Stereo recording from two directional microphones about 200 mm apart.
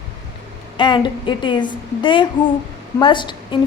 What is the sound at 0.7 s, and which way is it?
A woman's voice, 25° left (ahead or behind).